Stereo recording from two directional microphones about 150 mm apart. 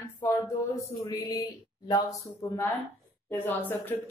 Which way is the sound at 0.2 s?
20° left (ahead or behind).